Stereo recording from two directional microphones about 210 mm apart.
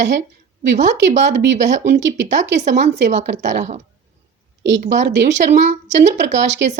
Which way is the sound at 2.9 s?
55° right (ahead or behind).